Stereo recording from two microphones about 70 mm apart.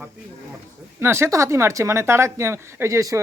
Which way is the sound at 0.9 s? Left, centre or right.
Right.